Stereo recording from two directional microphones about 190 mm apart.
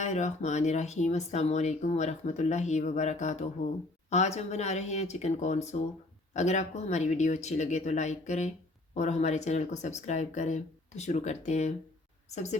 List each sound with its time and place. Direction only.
0.0 s speech: 35° left (ahead or behind)